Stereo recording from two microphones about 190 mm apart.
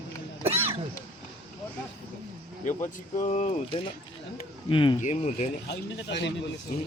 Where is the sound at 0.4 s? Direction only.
30° right (ahead or behind).